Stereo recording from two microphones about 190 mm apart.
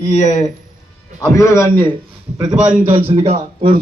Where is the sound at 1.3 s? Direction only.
15° left (ahead or behind).